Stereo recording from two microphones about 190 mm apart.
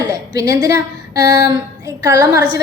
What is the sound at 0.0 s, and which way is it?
A woman's voice, 20° right (ahead or behind).